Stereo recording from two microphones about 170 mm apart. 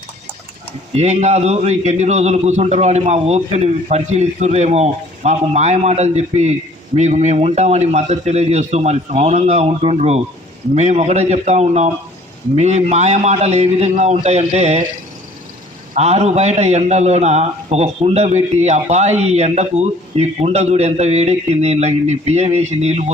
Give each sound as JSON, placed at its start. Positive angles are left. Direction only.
{"t": 0.9, "sound": "a man's voice", "side_deg": -40}
{"t": 16.0, "sound": "a man's voice", "side_deg": -40}